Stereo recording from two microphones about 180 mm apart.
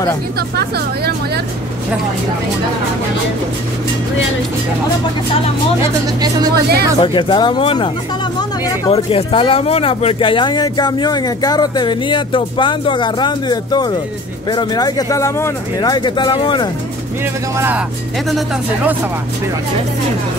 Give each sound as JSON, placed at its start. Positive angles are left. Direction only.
{"t": 0.4, "sound": "speech", "side_deg": -65}
{"t": 6.5, "sound": "speech", "side_deg": -60}
{"t": 7.0, "sound": "speech", "side_deg": 25}
{"t": 17.6, "sound": "speech", "side_deg": -10}